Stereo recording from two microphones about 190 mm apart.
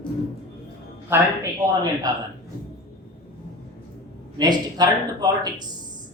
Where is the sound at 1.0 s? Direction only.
15° right (ahead or behind).